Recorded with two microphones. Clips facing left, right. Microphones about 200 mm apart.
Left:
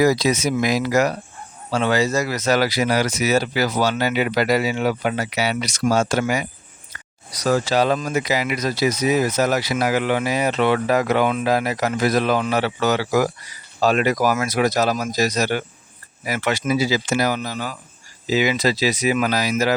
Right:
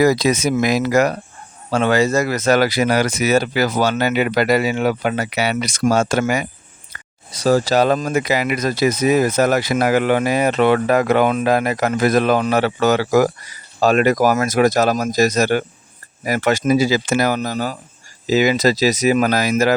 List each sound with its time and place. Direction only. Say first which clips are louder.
0.0 s speech: right 2 dB; 55° right (ahead or behind)
6.9 s a sound: right 2 dB; 55° right (ahead or behind)
7.3 s speech: right 4 dB; 30° right (ahead or behind); by 19.7 s 50° right (ahead or behind)